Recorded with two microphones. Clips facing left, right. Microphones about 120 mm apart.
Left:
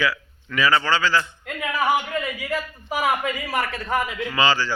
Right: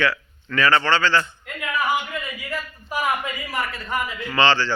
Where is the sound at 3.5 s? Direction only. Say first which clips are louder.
Left 2 dB; 75° left (ahead or behind).